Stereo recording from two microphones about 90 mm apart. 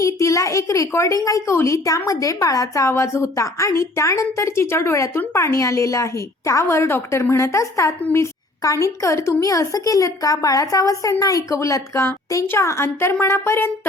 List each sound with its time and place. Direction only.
0.0 s a woman's voice: 35° left (ahead or behind)